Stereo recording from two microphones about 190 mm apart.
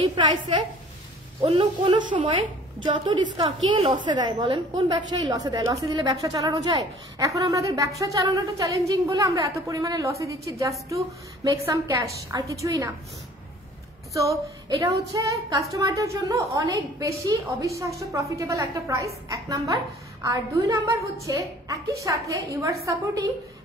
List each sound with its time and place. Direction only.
0.0 s a woman's voice: 25° right (ahead or behind)
14.1 s a woman's voice: 15° right (ahead or behind)